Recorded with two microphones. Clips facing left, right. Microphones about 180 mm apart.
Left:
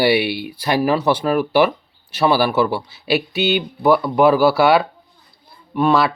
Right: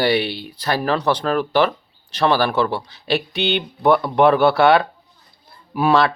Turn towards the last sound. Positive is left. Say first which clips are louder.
# even
turn(degrees=0)  # may be behind; listen again after turning